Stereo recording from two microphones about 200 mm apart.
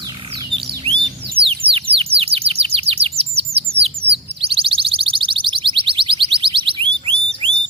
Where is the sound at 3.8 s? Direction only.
30° right (ahead or behind).